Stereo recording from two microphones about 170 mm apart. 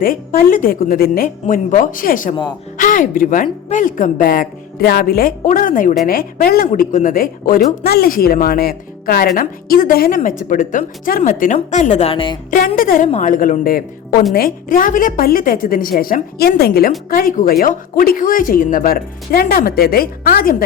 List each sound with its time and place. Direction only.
0.0 s speech: 55° left (ahead or behind); by 12.4 s 30° left (ahead or behind)
12.5 s speech: 55° left (ahead or behind)
13.1 s speech: 45° left (ahead or behind); by 20.7 s 60° left (ahead or behind)